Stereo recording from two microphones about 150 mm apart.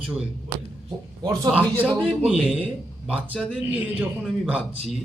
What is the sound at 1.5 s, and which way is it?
Speech, 10° right (ahead or behind).